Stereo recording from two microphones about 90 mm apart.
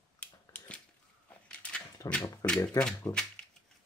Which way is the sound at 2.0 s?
45° left (ahead or behind).